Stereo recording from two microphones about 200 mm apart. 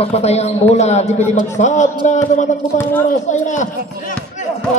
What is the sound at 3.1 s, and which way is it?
A man's voice, 35° left (ahead or behind).